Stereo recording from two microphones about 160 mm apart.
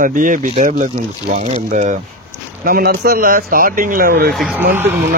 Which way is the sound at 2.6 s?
70° right (ahead or behind).